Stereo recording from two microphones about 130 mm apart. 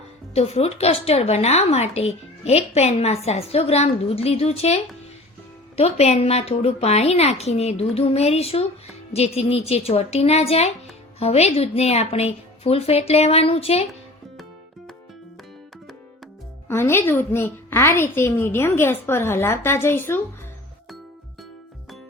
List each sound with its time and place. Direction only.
0.3 s speech: 50° left (ahead or behind)
16.6 s a woman's voice: 20° left (ahead or behind)